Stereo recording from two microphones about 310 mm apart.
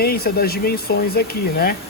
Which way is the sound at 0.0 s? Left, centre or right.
Left.